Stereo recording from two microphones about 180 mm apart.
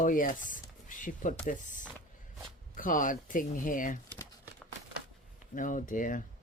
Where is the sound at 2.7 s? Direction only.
50° left (ahead or behind).